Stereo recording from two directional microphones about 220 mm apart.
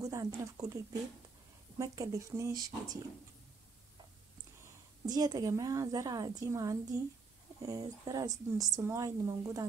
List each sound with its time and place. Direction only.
0.0 s speech: 15° right (ahead or behind)
1.8 s speech: 15° right (ahead or behind)
5.0 s speech: 15° right (ahead or behind)